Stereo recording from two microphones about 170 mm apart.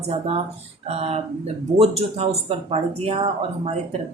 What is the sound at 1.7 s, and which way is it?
A woman's voice, 35° right (ahead or behind).